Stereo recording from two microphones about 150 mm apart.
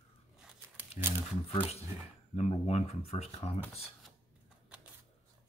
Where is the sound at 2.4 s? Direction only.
45° left (ahead or behind).